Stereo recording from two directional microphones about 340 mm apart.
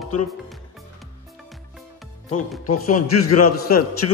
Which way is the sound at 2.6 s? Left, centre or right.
Left.